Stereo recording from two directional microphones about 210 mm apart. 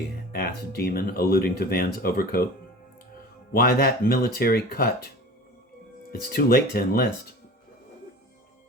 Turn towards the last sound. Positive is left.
turn(degrees=45)  # may be behind; listen again after turning